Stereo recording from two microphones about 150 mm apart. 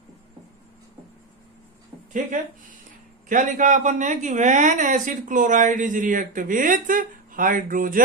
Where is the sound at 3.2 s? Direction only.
60° right (ahead or behind).